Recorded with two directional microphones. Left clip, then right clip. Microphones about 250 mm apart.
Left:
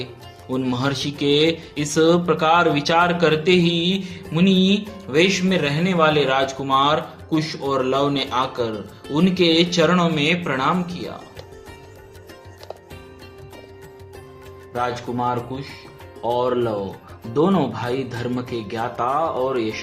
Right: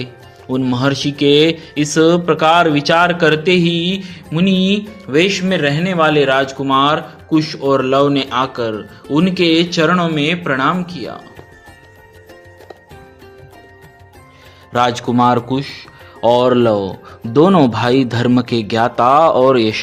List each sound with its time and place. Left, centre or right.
0.0 s speech: right
14.7 s speech: right